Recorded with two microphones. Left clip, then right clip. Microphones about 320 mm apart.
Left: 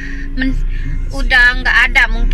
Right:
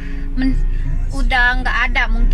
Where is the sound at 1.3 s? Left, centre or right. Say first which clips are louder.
Left 6 dB; centre.